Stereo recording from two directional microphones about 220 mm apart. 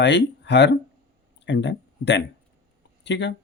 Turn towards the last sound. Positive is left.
turn(degrees=50)  # may be behind; listen again after turning